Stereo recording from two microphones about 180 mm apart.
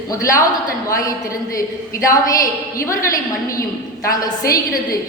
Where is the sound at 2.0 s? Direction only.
20° left (ahead or behind).